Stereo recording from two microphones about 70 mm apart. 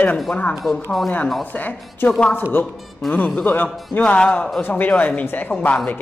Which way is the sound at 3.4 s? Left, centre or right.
Left.